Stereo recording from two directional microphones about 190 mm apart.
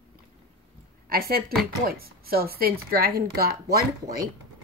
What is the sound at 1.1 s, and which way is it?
Speech, 55° right (ahead or behind).